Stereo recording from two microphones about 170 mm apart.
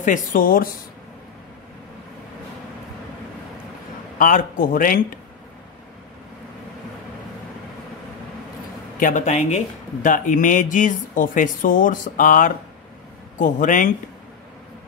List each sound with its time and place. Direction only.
0.0 s speech: 50° left (ahead or behind)
4.2 s a man's voice: 55° left (ahead or behind)
9.0 s speech: 45° left (ahead or behind)